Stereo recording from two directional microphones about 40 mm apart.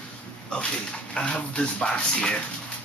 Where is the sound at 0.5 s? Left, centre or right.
Left.